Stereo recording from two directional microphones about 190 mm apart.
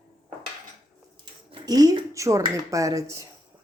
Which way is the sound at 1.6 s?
20° right (ahead or behind).